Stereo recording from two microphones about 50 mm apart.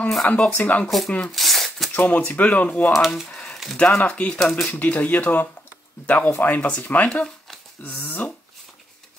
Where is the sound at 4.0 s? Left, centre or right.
Left.